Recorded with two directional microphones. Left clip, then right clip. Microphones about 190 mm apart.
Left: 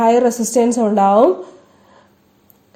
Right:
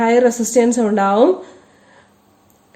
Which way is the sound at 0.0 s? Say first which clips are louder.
Even; 30° left (ahead or behind).